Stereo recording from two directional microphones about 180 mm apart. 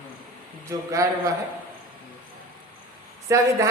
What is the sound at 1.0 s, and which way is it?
Speech, 20° right (ahead or behind).